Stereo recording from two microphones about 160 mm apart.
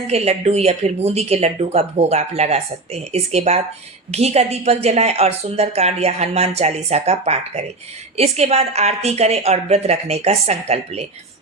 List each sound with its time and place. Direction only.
0.1 s speech: 40° right (ahead or behind)